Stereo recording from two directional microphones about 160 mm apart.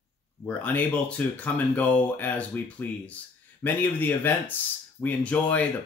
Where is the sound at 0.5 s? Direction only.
10° left (ahead or behind).